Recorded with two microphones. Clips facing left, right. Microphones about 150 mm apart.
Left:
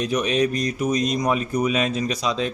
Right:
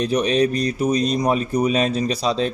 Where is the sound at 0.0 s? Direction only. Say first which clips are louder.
Right 3 dB; 35° right (ahead or behind).